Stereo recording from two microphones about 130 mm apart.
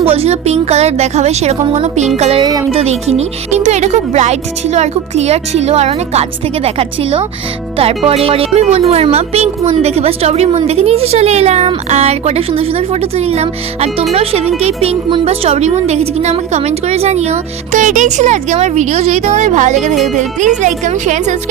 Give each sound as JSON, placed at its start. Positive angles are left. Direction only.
{"t": 0.0, "sound": "speech", "side_deg": -50}
{"t": 2.4, "sound": "speech", "side_deg": -30}
{"t": 2.7, "sound": "a woman's voice", "side_deg": -55}